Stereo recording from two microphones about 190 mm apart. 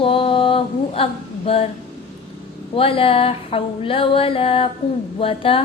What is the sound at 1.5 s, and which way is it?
Speech, 30° left (ahead or behind).